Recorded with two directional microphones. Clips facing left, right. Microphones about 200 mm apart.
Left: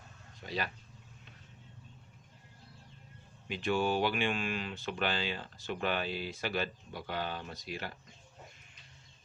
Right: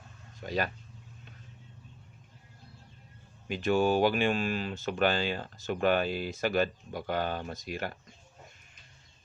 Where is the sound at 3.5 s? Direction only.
45° right (ahead or behind).